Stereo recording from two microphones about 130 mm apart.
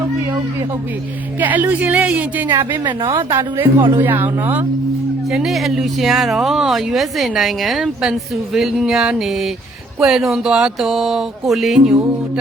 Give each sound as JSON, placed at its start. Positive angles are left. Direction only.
{"t": 1.4, "sound": "a woman's voice", "side_deg": -10}
{"t": 2.8, "sound": "a woman's voice", "side_deg": -35}
{"t": 3.2, "sound": "a woman's voice", "side_deg": -20}
{"t": 5.3, "sound": "speech", "side_deg": 0}